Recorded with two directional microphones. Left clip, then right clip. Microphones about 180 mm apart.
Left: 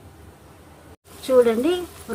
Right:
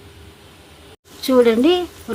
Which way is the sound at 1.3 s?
35° right (ahead or behind).